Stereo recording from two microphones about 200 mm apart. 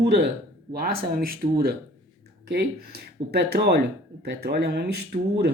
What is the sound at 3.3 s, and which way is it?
Speech, 50° right (ahead or behind).